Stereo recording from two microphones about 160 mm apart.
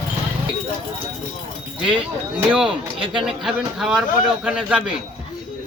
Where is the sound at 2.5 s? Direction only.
5° right (ahead or behind).